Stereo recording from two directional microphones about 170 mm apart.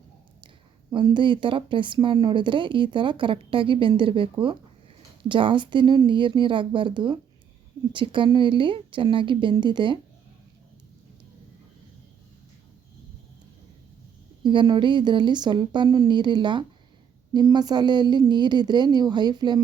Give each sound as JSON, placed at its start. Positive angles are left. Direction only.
{"t": 0.4, "sound": "speech", "side_deg": -25}
{"t": 14.4, "sound": "speech", "side_deg": -30}